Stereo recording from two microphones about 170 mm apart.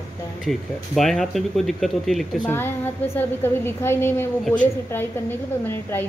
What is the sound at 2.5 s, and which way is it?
A woman's voice, 15° left (ahead or behind).